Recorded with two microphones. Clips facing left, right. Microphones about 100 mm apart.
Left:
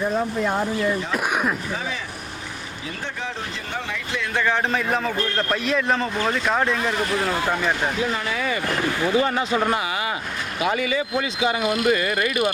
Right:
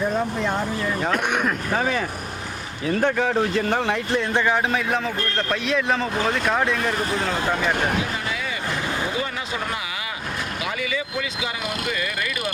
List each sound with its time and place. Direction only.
0.1 s a man's voice: 5° left (ahead or behind)
1.7 s speech: 55° right (ahead or behind)
4.4 s speech: 15° right (ahead or behind)
4.7 s a man's voice: centre (ahead or behind)
10.6 s speech: 35° left (ahead or behind)